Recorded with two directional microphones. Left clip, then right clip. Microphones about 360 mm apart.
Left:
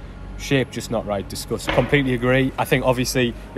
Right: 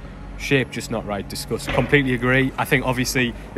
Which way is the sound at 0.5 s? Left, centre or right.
Centre.